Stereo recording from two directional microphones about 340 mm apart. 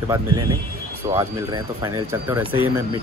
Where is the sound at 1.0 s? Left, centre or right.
Centre.